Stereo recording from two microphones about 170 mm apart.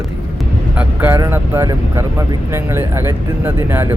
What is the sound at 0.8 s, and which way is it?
Speech, 15° right (ahead or behind).